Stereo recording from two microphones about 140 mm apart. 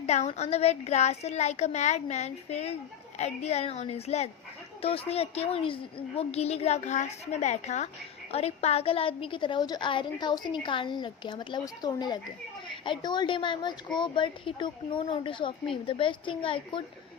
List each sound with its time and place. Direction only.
0.0 s a woman's voice: 50° left (ahead or behind)